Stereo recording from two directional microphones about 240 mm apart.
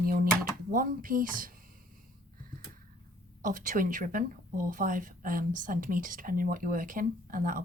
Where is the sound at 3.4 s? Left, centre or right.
Right.